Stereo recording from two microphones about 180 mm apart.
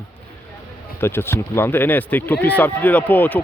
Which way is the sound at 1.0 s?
15° left (ahead or behind).